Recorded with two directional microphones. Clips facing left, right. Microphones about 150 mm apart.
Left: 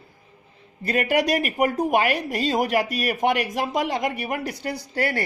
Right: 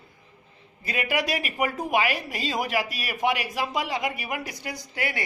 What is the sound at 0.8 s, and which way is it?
A woman's voice, 45° left (ahead or behind).